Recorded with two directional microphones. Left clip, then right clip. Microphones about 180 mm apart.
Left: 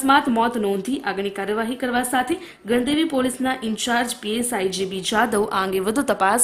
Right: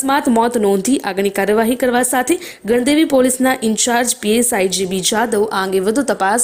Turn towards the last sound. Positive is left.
turn(degrees=-20)  # may be behind; listen again after turning